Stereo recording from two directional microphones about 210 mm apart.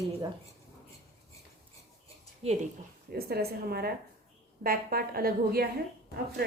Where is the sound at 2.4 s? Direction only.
30° right (ahead or behind).